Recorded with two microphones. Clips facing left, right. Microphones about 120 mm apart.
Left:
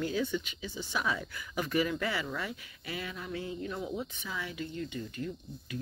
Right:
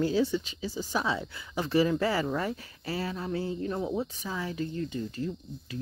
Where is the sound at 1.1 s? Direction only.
25° right (ahead or behind).